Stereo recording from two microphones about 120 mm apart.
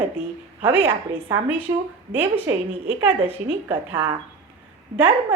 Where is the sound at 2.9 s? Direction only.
55° right (ahead or behind).